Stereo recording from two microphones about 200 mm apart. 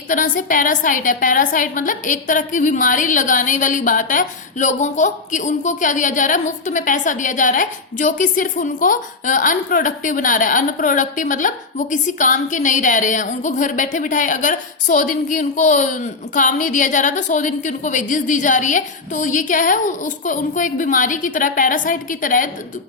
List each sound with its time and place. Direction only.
0.1 s a woman's voice: 40° left (ahead or behind)